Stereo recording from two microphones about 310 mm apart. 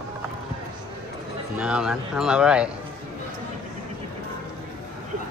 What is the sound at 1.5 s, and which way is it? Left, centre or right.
Speech, centre.